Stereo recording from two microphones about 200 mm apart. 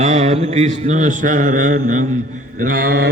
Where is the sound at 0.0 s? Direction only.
35° right (ahead or behind).